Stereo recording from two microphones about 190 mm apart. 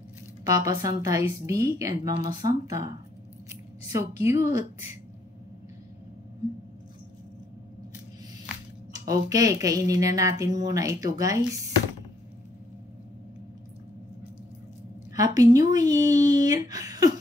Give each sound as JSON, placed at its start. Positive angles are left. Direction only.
{"t": 0.4, "sound": "a woman's voice", "side_deg": -20}
{"t": 8.9, "sound": "a woman's voice", "side_deg": -20}
{"t": 15.1, "sound": "speech", "side_deg": -20}